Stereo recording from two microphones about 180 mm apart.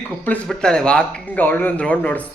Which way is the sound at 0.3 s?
5° left (ahead or behind).